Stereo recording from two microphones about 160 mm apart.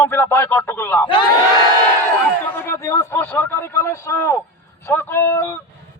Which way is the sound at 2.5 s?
15° left (ahead or behind).